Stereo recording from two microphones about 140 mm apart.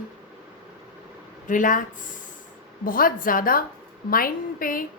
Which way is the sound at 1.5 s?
70° left (ahead or behind).